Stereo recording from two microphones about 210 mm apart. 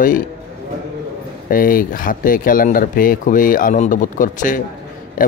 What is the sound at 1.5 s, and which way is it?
Speech, 40° left (ahead or behind).